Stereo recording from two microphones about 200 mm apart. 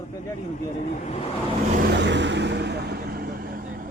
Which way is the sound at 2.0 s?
60° right (ahead or behind).